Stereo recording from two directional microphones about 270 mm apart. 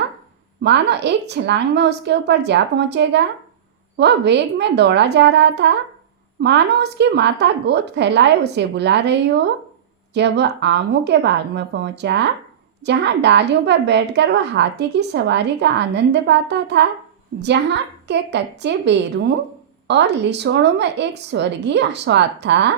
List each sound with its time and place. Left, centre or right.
0.6 s a woman's voice: right